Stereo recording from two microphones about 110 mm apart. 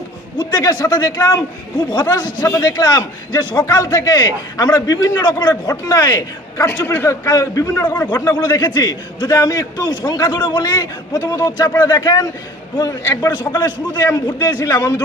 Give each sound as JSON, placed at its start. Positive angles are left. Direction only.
{"t": 0.4, "sound": "a man's voice", "side_deg": 35}